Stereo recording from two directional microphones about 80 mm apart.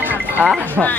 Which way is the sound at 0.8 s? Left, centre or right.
Centre.